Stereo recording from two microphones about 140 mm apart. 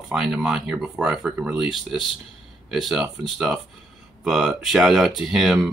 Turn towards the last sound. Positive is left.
turn(degrees=0)  # may be behind; listen again after turning